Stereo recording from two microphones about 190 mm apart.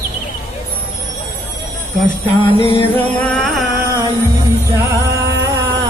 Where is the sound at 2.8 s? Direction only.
10° left (ahead or behind).